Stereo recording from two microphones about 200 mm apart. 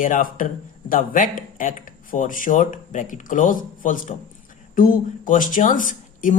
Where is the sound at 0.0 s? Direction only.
40° left (ahead or behind).